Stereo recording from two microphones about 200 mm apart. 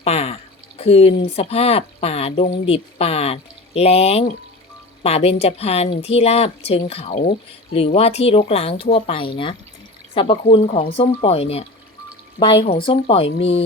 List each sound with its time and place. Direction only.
0.0 s a woman's voice: 30° left (ahead or behind)